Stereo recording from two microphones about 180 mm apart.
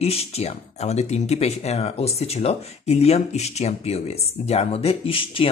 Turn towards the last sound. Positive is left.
turn(degrees=30)  # may be behind; listen again after turning